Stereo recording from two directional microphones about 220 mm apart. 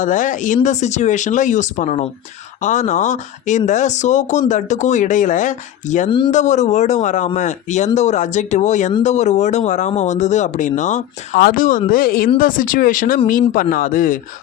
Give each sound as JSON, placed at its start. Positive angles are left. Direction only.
{"t": 0.0, "sound": "speech", "side_deg": 35}
{"t": 6.1, "sound": "speech", "side_deg": 20}
{"t": 6.3, "sound": "speech", "side_deg": 35}